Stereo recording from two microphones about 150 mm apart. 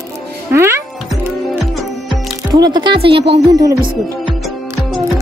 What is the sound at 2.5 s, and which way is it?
Music, 30° right (ahead or behind).